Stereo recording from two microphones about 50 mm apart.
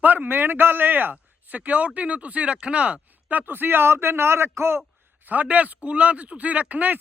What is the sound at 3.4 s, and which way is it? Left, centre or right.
A man's voice, right.